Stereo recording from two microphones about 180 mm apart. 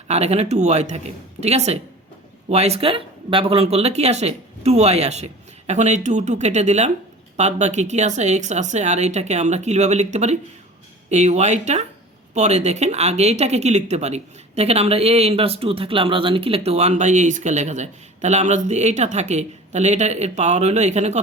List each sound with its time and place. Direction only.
0.1 s speech: 35° right (ahead or behind)